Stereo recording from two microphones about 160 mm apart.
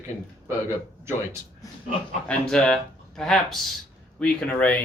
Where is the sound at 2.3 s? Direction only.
5° left (ahead or behind).